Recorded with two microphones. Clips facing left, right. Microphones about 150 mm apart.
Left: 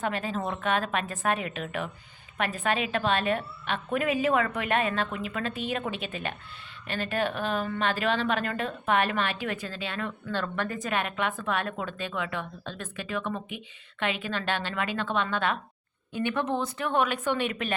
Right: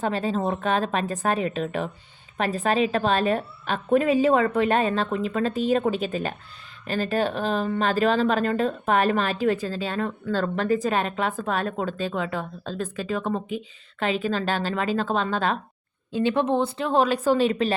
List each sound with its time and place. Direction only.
0.0 s speech: 35° right (ahead or behind)